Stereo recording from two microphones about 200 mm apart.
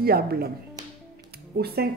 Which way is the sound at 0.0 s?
50° right (ahead or behind).